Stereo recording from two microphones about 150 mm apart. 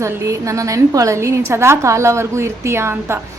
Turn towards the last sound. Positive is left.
turn(degrees=-15)  # may be behind; listen again after turning